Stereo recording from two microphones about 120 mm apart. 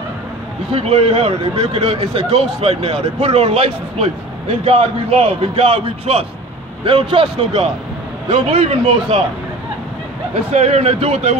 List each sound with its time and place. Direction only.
0.7 s speech: 55° right (ahead or behind)
6.8 s a man's voice: 45° right (ahead or behind)
10.5 s speech: 65° right (ahead or behind)